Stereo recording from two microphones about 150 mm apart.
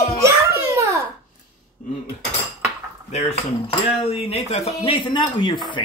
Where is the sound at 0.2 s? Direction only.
20° right (ahead or behind).